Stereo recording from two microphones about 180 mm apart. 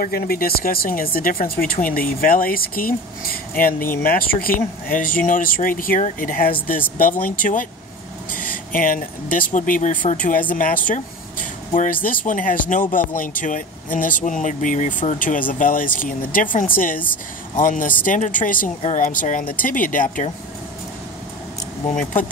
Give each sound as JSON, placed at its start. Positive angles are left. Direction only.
{"t": 0.0, "sound": "speech", "side_deg": 55}